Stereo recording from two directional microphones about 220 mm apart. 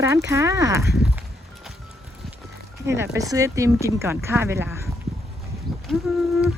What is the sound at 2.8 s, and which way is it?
Speech, 10° right (ahead or behind).